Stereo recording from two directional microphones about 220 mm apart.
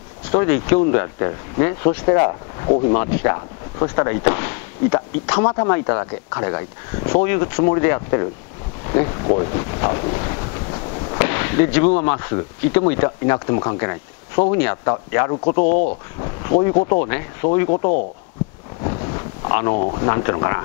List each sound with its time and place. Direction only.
0.3 s speech: 25° left (ahead or behind)
8.8 s wind noise: 20° left (ahead or behind)
12.9 s speech: 20° left (ahead or behind)
17.6 s speech: 30° left (ahead or behind)
18.8 s a sound: 25° left (ahead or behind)